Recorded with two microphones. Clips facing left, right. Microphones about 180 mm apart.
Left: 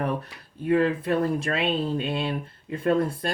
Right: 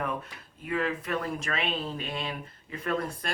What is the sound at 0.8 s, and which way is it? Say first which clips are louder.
Speech: left 5 dB; 30° left (ahead or behind).